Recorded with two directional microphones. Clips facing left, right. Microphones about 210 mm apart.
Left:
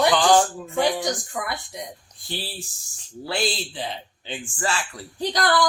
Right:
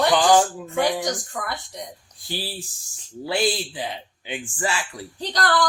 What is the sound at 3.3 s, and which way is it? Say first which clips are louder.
Speech: right 3 dB; 15° right (ahead or behind).